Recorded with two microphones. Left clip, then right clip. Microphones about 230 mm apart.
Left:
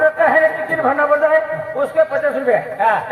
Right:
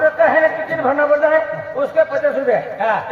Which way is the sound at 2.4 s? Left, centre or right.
Left.